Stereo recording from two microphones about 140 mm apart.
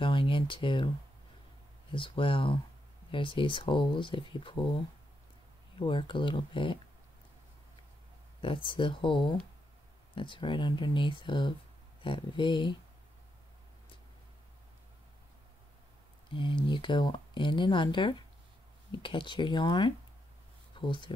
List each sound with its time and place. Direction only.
0.0 s a sound: 35° left (ahead or behind)
1.9 s speech: 40° left (ahead or behind)
5.8 s speech: 35° left (ahead or behind)
8.6 s speech: 35° left (ahead or behind)
16.3 s speech: 35° left (ahead or behind)